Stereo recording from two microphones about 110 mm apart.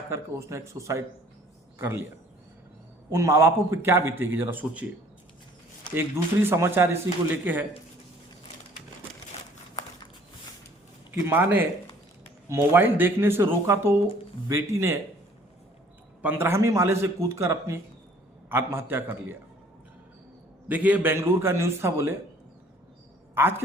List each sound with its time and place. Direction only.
0.1 s a man's voice: 25° right (ahead or behind)
3.1 s a man's voice: 25° right (ahead or behind)
5.9 s a man's voice: 20° right (ahead or behind)
11.1 s a man's voice: 20° right (ahead or behind)
16.2 s a man's voice: 20° right (ahead or behind)
20.7 s a man's voice: 15° right (ahead or behind)
23.3 s a woman's voice: 20° right (ahead or behind)